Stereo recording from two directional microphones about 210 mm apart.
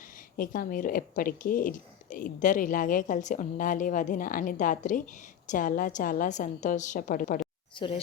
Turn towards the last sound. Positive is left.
turn(degrees=25)  # may be behind; listen again after turning